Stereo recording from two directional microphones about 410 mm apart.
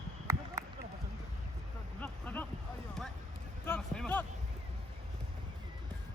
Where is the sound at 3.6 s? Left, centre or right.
Centre.